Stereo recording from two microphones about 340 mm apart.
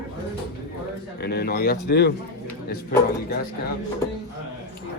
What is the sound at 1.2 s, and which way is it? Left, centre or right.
Speech, left.